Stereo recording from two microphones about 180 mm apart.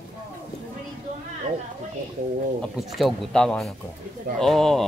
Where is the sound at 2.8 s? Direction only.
Centre (ahead or behind).